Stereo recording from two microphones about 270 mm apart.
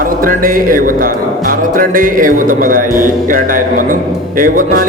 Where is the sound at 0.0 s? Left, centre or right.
Right.